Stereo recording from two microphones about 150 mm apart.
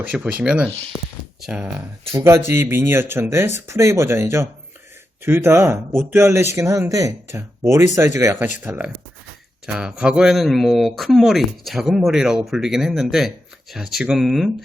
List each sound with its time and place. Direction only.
0.0 s a man's voice: 10° right (ahead or behind)